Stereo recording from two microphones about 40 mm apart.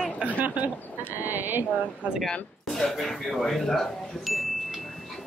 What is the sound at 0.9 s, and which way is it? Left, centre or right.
Speech, right.